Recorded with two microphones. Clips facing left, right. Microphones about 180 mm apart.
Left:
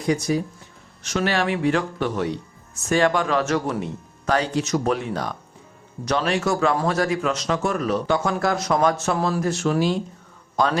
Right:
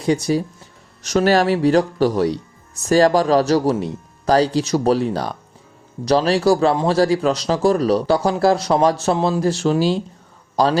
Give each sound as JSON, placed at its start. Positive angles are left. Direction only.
{"t": 0.0, "sound": "a man's voice", "side_deg": -30}